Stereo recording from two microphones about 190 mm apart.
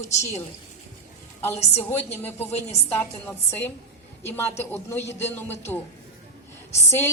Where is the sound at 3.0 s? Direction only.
10° left (ahead or behind).